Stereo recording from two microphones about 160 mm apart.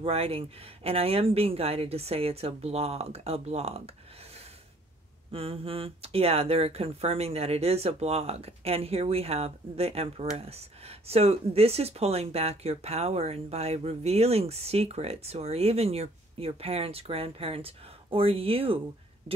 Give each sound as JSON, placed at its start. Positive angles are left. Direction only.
{"t": 0.0, "sound": "speech", "side_deg": -40}